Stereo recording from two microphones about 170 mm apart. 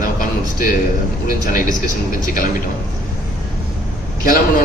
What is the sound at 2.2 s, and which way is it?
Speech, 55° left (ahead or behind).